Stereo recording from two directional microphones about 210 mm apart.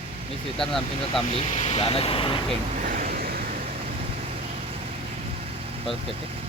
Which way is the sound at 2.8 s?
40° right (ahead or behind).